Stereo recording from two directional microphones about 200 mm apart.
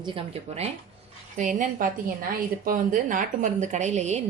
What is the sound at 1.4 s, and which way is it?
A woman's voice, 40° right (ahead or behind).